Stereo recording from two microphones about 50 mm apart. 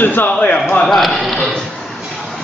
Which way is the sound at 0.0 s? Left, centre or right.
Left.